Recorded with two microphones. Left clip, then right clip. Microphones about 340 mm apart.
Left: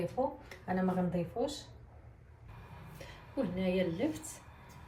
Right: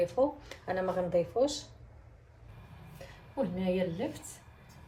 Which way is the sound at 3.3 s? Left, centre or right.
Centre.